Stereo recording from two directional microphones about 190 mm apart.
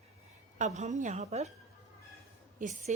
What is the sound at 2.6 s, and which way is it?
Speech, 40° right (ahead or behind).